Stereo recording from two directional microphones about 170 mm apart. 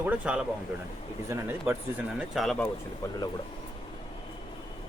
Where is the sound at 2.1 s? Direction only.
Centre (ahead or behind).